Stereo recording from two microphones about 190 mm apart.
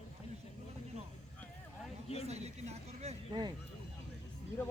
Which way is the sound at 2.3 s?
35° right (ahead or behind).